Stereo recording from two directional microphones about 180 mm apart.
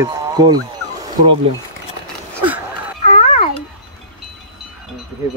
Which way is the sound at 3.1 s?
35° left (ahead or behind).